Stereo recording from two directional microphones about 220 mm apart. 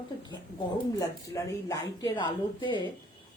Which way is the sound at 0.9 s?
15° left (ahead or behind).